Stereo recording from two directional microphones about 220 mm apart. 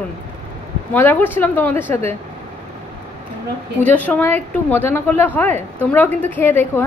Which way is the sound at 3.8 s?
5° left (ahead or behind).